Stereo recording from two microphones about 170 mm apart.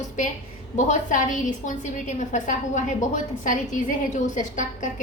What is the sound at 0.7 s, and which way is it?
A woman's voice, 45° left (ahead or behind).